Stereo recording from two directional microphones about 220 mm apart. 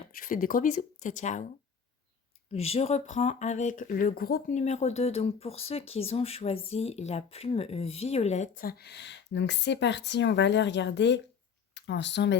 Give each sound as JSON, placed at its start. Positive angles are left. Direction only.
{"t": 0.2, "sound": "speech", "side_deg": 40}
{"t": 2.5, "sound": "speech", "side_deg": 25}